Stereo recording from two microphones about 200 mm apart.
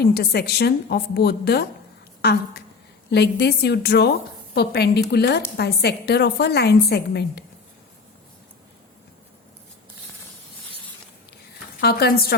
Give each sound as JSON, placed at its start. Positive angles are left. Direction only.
{"t": 0.0, "sound": "a woman's voice", "side_deg": 55}
{"t": 11.8, "sound": "a woman's voice", "side_deg": 50}